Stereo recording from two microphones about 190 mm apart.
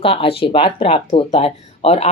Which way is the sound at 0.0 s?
30° left (ahead or behind).